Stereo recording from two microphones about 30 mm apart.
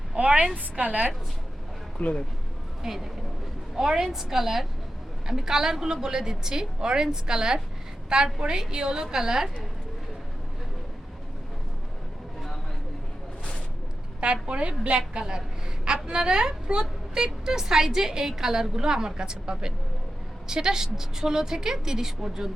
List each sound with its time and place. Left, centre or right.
0.2 s a woman's voice: right
2.0 s speech: left
2.8 s a woman's voice: centre
14.4 s a woman's voice: right; by 22.4 s centre